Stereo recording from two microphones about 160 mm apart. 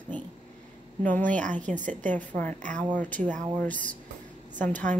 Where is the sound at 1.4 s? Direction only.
50° right (ahead or behind).